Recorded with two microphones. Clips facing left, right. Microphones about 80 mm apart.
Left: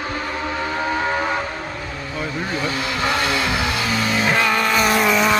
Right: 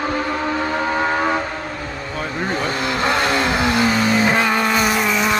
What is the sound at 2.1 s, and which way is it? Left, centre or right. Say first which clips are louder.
Vehicle: right 2 dB; right.